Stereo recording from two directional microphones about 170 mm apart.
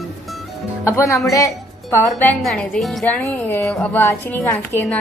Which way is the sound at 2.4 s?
Centre (ahead or behind).